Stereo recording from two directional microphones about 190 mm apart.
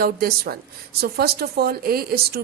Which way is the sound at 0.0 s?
55° right (ahead or behind).